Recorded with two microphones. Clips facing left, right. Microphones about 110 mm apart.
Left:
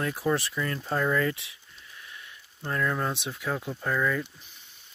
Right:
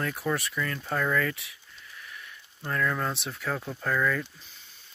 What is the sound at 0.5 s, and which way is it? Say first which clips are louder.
Speech: left 1 dB; 25° left (ahead or behind).